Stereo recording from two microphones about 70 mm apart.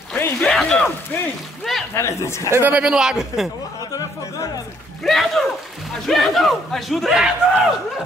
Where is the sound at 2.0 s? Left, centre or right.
Left.